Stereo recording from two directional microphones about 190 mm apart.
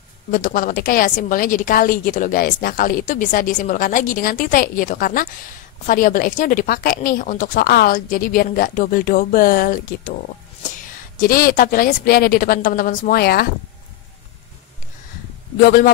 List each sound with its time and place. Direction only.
0.3 s a woman's voice: 45° left (ahead or behind)
11.1 s a woman's voice: 50° left (ahead or behind)
15.6 s a woman's voice: 50° left (ahead or behind)